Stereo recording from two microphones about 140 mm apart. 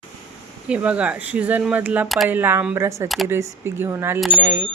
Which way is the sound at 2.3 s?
15° right (ahead or behind).